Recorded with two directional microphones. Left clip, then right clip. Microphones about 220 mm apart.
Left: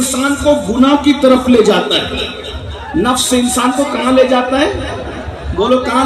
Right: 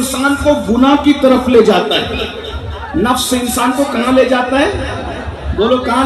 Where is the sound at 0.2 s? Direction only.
40° left (ahead or behind).